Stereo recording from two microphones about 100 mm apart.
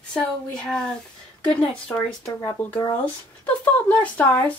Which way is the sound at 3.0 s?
15° left (ahead or behind).